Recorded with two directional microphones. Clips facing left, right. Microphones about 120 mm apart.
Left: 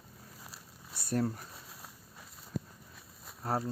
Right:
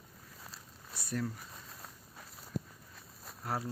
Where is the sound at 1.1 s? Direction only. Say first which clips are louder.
Left 5 dB; 45° left (ahead or behind).